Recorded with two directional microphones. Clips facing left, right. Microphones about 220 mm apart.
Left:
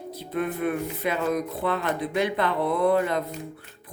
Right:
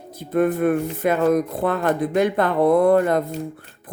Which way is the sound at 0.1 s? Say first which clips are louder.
Right 9 dB; 50° right (ahead or behind).